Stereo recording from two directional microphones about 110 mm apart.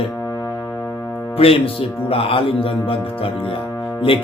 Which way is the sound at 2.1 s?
55° left (ahead or behind).